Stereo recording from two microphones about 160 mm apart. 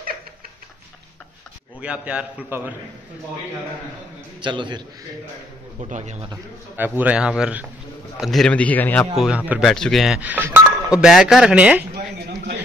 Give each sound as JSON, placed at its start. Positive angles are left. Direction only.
{"t": 1.8, "sound": "a man's voice", "side_deg": -5}
{"t": 4.4, "sound": "a man's voice", "side_deg": -30}
{"t": 5.9, "sound": "speech", "side_deg": -45}
{"t": 6.8, "sound": "a man's voice", "side_deg": -10}
{"t": 9.1, "sound": "speech", "side_deg": 0}